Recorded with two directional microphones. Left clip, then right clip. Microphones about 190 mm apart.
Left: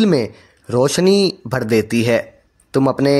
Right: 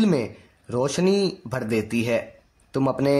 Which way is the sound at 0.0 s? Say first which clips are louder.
Left 7 dB; 35° left (ahead or behind).